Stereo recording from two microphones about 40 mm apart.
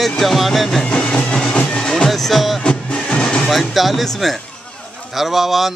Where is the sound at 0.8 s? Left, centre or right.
Left.